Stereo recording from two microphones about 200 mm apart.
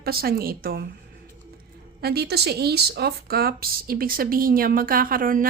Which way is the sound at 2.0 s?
50° right (ahead or behind).